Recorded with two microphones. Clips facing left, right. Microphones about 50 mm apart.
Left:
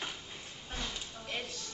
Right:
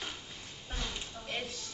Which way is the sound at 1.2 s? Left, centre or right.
Centre.